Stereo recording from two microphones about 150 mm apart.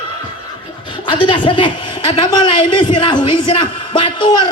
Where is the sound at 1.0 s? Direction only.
30° left (ahead or behind).